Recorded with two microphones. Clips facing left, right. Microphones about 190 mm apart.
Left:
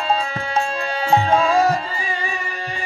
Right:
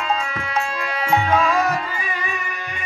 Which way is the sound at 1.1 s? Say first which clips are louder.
Left 2 dB; 30° left (ahead or behind).